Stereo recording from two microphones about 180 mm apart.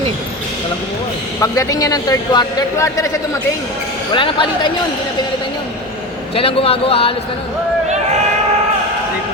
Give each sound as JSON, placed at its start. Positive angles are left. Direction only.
{"t": 1.4, "sound": "speech", "side_deg": 20}
{"t": 4.1, "sound": "speech", "side_deg": 25}
{"t": 6.3, "sound": "speech", "side_deg": 30}